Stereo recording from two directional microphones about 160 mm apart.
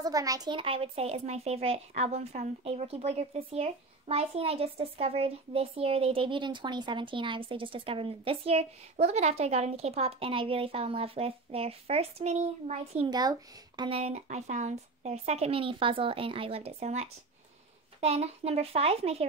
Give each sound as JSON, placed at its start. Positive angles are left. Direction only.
{"t": 0.0, "sound": "speech", "side_deg": -20}
{"t": 13.1, "sound": "speech", "side_deg": -25}